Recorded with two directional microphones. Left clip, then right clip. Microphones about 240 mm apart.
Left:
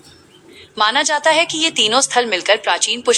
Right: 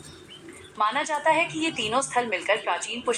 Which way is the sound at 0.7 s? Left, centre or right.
Left.